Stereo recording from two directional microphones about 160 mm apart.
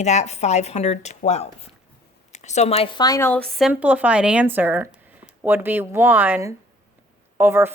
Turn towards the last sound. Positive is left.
turn(degrees=-15)  # may be behind; listen again after turning